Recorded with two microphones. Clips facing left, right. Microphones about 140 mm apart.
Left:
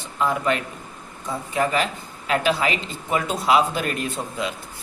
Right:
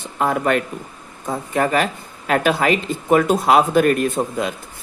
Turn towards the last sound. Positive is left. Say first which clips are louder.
# right 6 dB
turn(degrees=-50)  # may be behind; listen again after turning